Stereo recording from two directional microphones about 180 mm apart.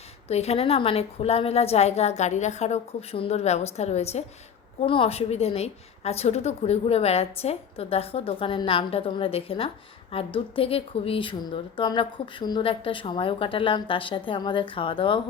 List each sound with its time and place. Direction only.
0.3 s a woman's voice: 35° left (ahead or behind)